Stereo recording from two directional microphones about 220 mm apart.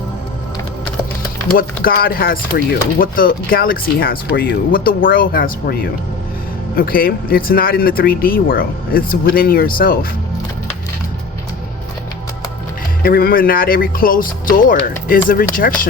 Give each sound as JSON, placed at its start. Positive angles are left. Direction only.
{"t": 1.5, "sound": "speech", "side_deg": 40}
{"t": 13.0, "sound": "speech", "side_deg": 40}